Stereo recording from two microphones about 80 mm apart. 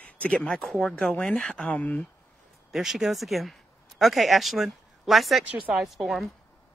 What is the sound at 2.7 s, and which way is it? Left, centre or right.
Speech, centre.